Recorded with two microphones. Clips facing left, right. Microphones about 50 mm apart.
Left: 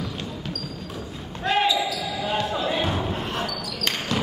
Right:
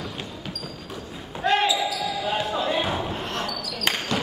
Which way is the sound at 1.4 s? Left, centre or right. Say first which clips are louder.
Even; centre.